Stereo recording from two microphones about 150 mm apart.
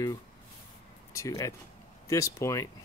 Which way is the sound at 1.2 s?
20° left (ahead or behind).